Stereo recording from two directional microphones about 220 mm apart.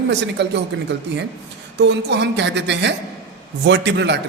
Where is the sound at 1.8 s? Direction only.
50° right (ahead or behind).